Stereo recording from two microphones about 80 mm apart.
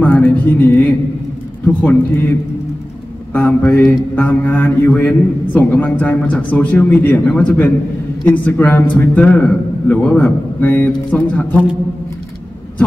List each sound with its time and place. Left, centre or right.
0.0 s a sound: centre
1.7 s a man's voice: left
3.3 s a man's voice: left